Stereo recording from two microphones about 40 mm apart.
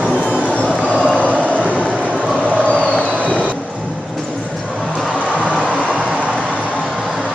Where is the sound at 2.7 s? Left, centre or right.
Left.